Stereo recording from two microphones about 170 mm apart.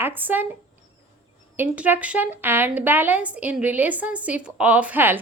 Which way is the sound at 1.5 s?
10° right (ahead or behind).